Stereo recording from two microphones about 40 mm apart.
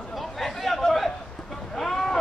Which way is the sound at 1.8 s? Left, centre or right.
Centre.